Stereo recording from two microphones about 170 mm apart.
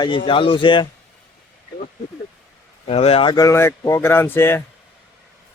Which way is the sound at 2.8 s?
35° left (ahead or behind).